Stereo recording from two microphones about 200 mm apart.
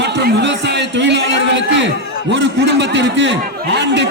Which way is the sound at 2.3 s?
60° right (ahead or behind).